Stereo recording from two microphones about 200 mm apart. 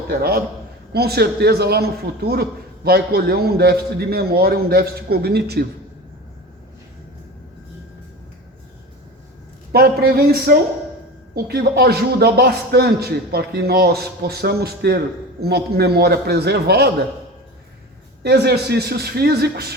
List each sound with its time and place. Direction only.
0.1 s a man's voice: 50° right (ahead or behind)
9.7 s a man's voice: 50° right (ahead or behind)
18.2 s a man's voice: 55° right (ahead or behind)